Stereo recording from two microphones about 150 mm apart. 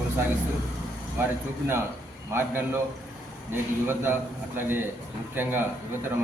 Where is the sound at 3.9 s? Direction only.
15° right (ahead or behind).